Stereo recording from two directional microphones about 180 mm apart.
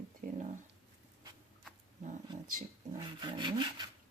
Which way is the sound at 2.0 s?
50° right (ahead or behind).